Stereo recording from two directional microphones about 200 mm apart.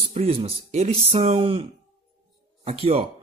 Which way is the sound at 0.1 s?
30° right (ahead or behind).